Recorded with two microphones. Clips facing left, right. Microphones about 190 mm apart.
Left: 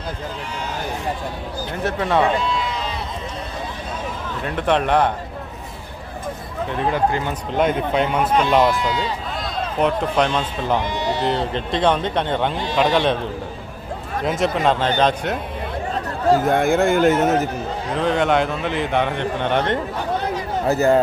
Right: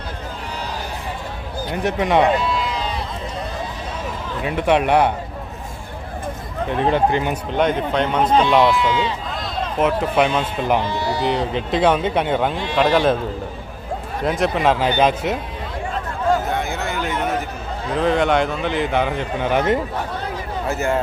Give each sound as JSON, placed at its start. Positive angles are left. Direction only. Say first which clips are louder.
{"t": 1.8, "sound": "speech", "louder": "right 2 dB", "side_deg": -15}
{"t": 2.4, "sound": "sheep", "louder": "right 1 dB", "side_deg": 0}
{"t": 4.4, "sound": "speech", "louder": "right 2 dB", "side_deg": -10}
{"t": 6.8, "sound": "speech", "louder": "right 3 dB", "side_deg": -20}
{"t": 7.5, "sound": "speech", "louder": "left 1 dB", "side_deg": 5}
{"t": 8.6, "sound": "speech", "louder": "right 2 dB", "side_deg": 40}
{"t": 9.7, "sound": "speech", "louder": "right 1 dB", "side_deg": -5}
{"t": 10.8, "sound": "speech", "louder": "even", "side_deg": 20}
{"t": 11.2, "sound": "speech", "louder": "right 1 dB", "side_deg": 0}
{"t": 14.3, "sound": "speech", "louder": "right 1 dB", "side_deg": 0}
{"t": 16.5, "sound": "speech", "louder": "left 8 dB", "side_deg": 50}
{"t": 17.9, "sound": "speech", "louder": "right 1 dB", "side_deg": 0}
{"t": 20.7, "sound": "speech", "louder": "left 5 dB", "side_deg": 35}